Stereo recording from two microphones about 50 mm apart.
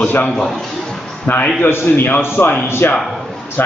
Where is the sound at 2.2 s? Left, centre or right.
Left.